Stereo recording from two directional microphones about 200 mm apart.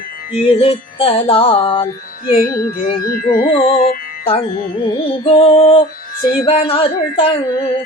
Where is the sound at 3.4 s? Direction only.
25° left (ahead or behind).